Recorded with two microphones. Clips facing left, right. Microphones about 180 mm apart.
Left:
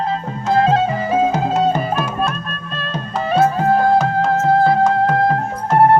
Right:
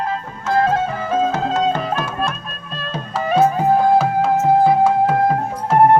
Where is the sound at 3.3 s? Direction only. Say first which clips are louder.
Even; 10° right (ahead or behind).